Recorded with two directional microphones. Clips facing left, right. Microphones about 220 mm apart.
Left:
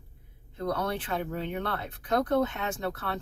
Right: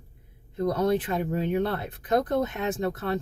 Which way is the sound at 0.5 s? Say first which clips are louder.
Right 7 dB; 20° right (ahead or behind).